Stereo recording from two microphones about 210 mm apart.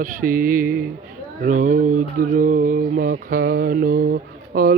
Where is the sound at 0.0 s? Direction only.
40° right (ahead or behind).